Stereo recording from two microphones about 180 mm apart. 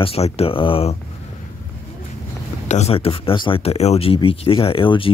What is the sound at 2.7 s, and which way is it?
Speech, 35° left (ahead or behind).